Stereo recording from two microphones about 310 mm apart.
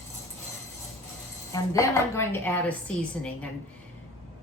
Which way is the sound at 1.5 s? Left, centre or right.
Centre.